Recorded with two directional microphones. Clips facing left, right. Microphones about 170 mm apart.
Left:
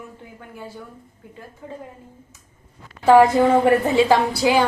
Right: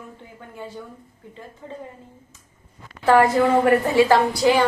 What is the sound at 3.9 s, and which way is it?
Speech, 15° left (ahead or behind).